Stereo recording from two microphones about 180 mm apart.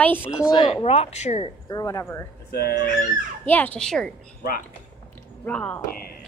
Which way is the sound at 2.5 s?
60° left (ahead or behind).